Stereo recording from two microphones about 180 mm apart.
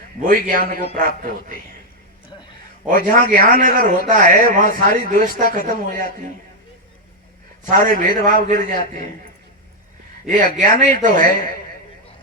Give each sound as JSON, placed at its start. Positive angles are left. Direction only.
{"t": 0.2, "sound": "a man's voice", "side_deg": -50}
{"t": 2.8, "sound": "a man's voice", "side_deg": -45}
{"t": 7.6, "sound": "a man's voice", "side_deg": -45}
{"t": 10.2, "sound": "a man's voice", "side_deg": -45}